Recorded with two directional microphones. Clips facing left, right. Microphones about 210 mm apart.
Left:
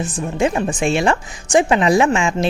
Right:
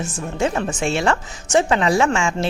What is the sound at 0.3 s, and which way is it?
Speech, 15° left (ahead or behind).